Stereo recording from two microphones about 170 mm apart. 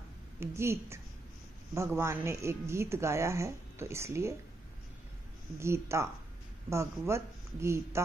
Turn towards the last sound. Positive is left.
turn(degrees=-15)  # may be behind; listen again after turning